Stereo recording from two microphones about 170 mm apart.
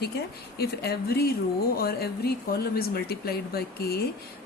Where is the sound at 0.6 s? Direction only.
70° left (ahead or behind).